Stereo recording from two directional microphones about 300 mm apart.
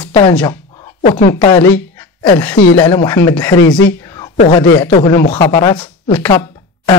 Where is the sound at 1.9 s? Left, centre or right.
Centre.